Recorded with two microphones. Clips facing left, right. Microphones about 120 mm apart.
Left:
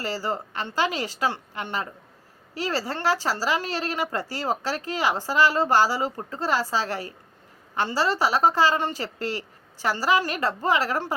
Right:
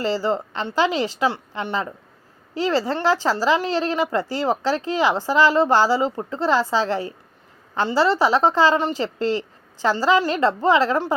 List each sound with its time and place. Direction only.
0.0 s a woman's voice: 20° right (ahead or behind)